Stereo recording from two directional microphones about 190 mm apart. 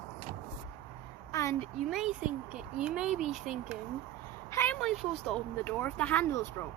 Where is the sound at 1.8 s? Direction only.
Centre (ahead or behind).